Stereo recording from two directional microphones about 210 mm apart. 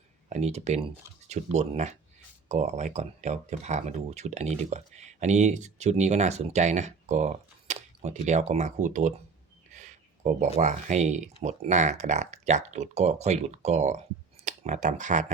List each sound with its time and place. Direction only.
0.3 s speech: 30° right (ahead or behind)